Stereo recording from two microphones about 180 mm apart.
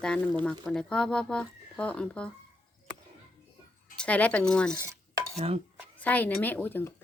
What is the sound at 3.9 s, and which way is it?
Speech, 5° left (ahead or behind).